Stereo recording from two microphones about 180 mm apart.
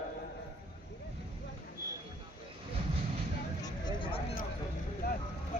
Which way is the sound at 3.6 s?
25° left (ahead or behind).